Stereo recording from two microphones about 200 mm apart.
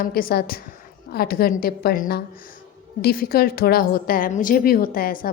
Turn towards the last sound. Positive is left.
turn(degrees=45)  # may be behind; listen again after turning